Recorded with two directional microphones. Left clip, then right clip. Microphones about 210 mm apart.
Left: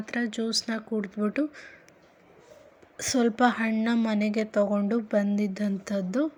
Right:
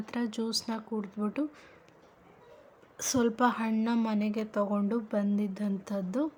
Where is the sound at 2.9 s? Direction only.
Centre (ahead or behind).